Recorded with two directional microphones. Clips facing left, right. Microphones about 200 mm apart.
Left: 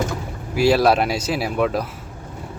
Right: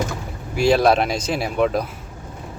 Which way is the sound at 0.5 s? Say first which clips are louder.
Even; 5° left (ahead or behind).